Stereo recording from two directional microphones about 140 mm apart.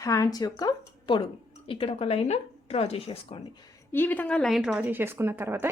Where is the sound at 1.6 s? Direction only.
40° left (ahead or behind).